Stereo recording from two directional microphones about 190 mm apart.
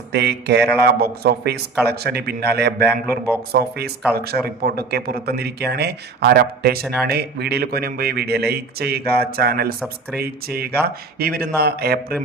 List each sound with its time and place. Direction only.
0.1 s a man's voice: 60° right (ahead or behind)